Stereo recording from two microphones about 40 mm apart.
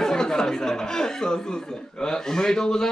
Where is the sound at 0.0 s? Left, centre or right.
Centre.